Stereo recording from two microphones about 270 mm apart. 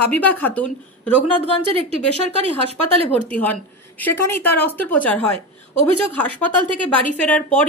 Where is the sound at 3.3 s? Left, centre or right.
Centre.